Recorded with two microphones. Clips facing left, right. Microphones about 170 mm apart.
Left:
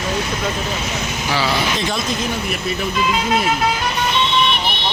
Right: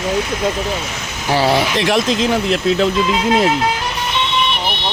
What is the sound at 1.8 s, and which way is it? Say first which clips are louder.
Speech: right 6 dB; 90° right.